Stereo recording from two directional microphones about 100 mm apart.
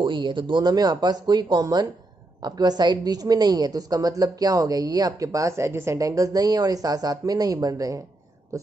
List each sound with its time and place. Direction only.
0.0 s a woman's voice: 55° right (ahead or behind); by 8.0 s 35° right (ahead or behind)